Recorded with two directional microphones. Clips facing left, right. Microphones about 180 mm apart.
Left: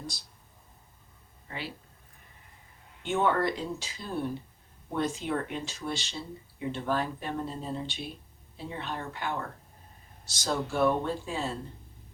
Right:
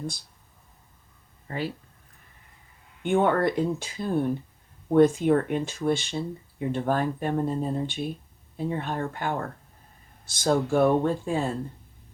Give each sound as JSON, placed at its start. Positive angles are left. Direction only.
{"t": 1.5, "sound": "speech", "side_deg": -45}
{"t": 3.0, "sound": "speech", "side_deg": -55}